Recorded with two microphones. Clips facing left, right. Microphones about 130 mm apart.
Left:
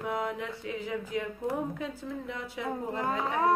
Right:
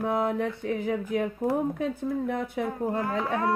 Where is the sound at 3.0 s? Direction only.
20° left (ahead or behind).